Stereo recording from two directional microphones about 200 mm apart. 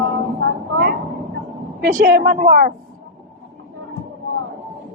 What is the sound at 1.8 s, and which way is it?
Speech, 50° right (ahead or behind).